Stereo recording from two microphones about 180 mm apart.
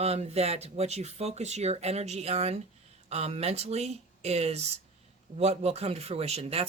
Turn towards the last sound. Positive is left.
turn(degrees=-35)  # may be behind; listen again after turning